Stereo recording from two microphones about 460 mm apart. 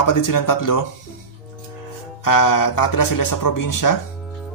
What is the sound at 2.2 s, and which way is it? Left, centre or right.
A man's voice, left.